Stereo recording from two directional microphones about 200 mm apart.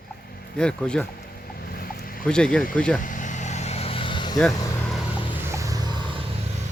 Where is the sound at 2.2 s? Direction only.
5° left (ahead or behind).